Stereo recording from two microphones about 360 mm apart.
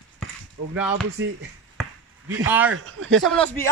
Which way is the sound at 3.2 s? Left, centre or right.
Centre.